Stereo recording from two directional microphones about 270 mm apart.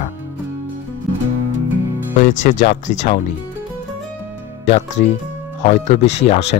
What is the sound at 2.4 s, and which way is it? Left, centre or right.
Speech, left.